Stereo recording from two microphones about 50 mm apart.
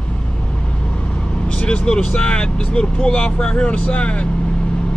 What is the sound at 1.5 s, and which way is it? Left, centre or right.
Speech, left.